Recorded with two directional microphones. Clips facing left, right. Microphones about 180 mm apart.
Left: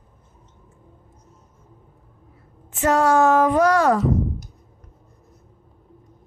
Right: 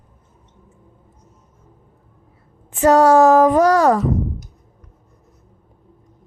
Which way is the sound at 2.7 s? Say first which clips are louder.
Right 6 dB; 35° right (ahead or behind).